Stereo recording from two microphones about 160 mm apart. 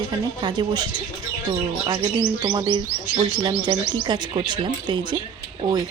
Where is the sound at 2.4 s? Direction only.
30° right (ahead or behind).